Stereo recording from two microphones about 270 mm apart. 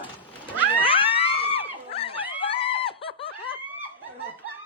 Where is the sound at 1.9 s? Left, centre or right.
Left.